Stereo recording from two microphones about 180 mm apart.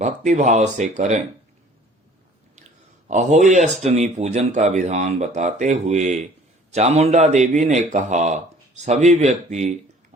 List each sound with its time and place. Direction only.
0.0 s speech: 40° right (ahead or behind)
3.1 s speech: 40° right (ahead or behind)